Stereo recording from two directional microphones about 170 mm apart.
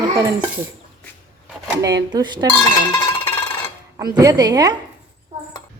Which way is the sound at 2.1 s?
25° right (ahead or behind).